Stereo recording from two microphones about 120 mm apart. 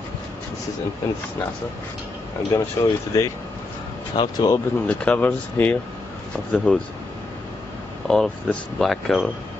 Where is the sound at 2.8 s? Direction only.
30° left (ahead or behind).